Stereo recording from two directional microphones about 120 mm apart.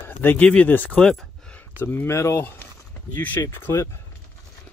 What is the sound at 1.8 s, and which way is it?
Speech, 20° left (ahead or behind).